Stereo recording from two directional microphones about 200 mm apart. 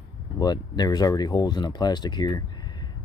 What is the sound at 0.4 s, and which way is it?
Speech, 20° left (ahead or behind).